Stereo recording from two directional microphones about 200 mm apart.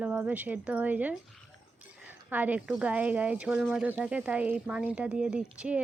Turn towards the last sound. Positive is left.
turn(degrees=-5)  # may be behind; listen again after turning